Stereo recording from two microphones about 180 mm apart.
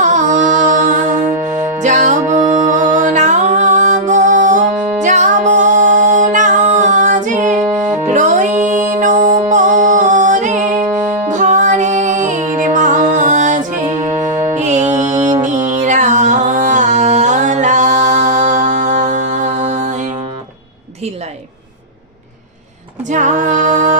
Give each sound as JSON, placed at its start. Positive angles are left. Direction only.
{"t": 0.0, "sound": "music", "side_deg": -45}
{"t": 1.3, "sound": "music", "side_deg": -15}
{"t": 1.8, "sound": "music", "side_deg": -40}
{"t": 10.8, "sound": "music", "side_deg": -10}
{"t": 11.3, "sound": "music", "side_deg": -40}
{"t": 14.3, "sound": "music", "side_deg": -15}
{"t": 14.5, "sound": "music", "side_deg": -40}
{"t": 23.0, "sound": "music", "side_deg": -45}